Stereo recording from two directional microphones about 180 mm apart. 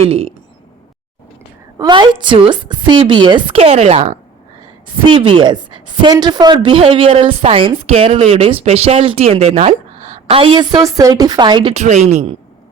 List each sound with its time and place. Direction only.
0.1 s a man's voice: 35° right (ahead or behind)
1.8 s a woman's voice: 25° right (ahead or behind)
11.8 s a man's voice: 40° right (ahead or behind)